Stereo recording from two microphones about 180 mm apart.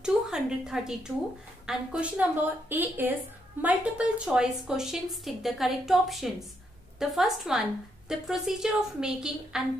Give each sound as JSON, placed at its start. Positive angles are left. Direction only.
{"t": 0.0, "sound": "a woman's voice", "side_deg": -5}